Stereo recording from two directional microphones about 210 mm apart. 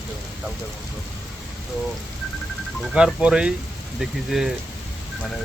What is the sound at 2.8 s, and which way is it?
Speech, 5° right (ahead or behind).